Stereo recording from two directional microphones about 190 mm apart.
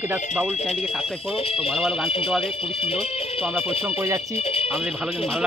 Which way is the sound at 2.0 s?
30° left (ahead or behind).